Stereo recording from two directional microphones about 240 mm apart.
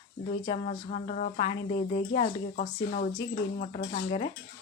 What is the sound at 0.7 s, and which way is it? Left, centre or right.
Speech, left.